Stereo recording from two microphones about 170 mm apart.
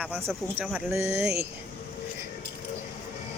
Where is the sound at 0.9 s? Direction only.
15° right (ahead or behind).